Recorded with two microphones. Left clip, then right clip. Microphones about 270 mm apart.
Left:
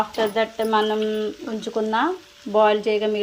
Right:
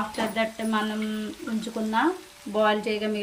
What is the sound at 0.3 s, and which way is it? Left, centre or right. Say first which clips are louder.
Speech: left 7 dB; centre.